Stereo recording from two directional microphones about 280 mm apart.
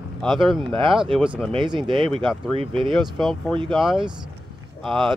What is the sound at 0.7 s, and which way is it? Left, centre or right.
Speech, centre.